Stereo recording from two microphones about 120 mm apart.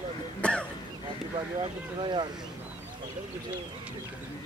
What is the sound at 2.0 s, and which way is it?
Speech, 40° right (ahead or behind).